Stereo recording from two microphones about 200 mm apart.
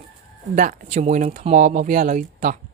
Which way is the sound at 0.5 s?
40° right (ahead or behind).